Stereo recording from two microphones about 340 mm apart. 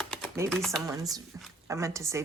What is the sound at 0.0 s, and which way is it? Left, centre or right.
Typing, centre.